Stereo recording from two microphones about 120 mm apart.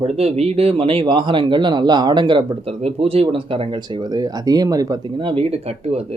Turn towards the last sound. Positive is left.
turn(degrees=-55)  # may be behind; listen again after turning